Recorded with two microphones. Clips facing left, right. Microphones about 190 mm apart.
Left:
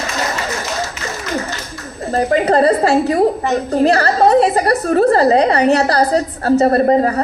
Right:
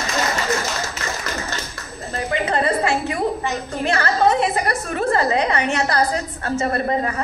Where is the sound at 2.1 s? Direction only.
40° left (ahead or behind).